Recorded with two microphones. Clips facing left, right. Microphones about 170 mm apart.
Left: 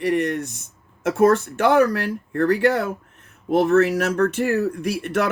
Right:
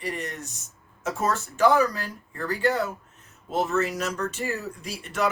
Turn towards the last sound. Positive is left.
turn(degrees=65)  # may be behind; listen again after turning